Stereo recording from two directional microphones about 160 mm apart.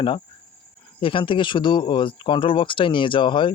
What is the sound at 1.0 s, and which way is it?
Speech, 30° left (ahead or behind).